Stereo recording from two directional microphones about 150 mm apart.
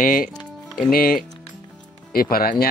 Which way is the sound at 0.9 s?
75° left (ahead or behind).